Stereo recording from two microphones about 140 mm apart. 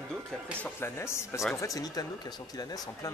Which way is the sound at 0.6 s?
20° left (ahead or behind).